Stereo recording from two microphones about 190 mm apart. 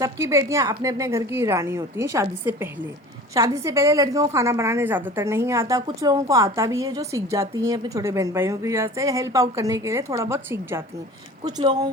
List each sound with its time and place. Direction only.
0.0 s a woman's voice: 15° right (ahead or behind)